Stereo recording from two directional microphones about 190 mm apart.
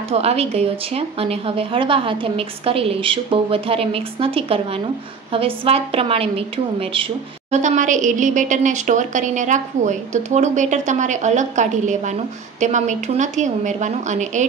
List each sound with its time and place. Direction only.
0.1 s a woman's voice: 35° right (ahead or behind)
7.5 s speech: 40° right (ahead or behind)